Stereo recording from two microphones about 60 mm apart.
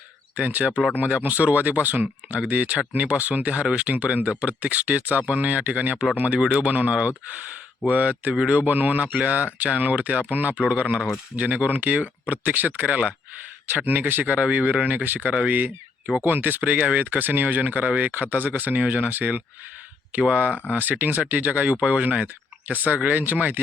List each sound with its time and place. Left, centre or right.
0.3 s speech: right
6.4 s speech: centre; by 23.6 s right